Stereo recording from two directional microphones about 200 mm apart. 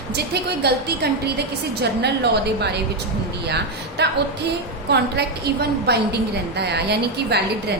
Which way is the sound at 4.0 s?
55° right (ahead or behind).